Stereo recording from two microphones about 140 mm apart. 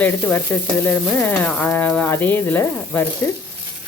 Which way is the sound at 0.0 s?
10° left (ahead or behind).